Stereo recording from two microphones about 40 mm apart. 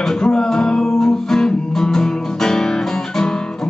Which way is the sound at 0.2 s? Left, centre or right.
Centre.